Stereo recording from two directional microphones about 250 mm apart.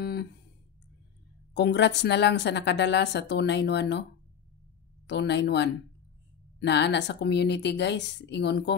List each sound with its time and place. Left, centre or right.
0.0 s a sound: left
1.5 s a woman's voice: left
5.0 s a woman's voice: left